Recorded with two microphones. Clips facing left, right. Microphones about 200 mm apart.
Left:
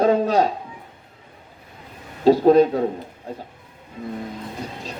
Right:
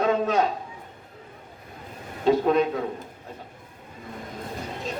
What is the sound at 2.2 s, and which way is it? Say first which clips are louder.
Speech: left 7 dB; 35° left (ahead or behind).